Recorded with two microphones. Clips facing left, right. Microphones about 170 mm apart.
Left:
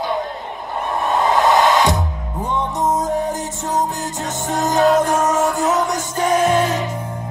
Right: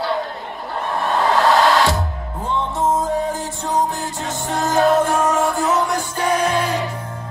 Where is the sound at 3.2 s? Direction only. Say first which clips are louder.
Left 1 dB; 20° left (ahead or behind).